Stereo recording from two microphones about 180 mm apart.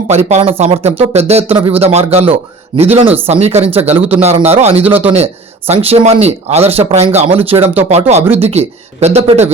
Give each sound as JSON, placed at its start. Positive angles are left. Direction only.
{"t": 0.1, "sound": "speech", "side_deg": -35}